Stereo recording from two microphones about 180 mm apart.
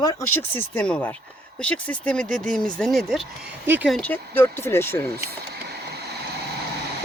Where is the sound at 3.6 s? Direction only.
10° right (ahead or behind).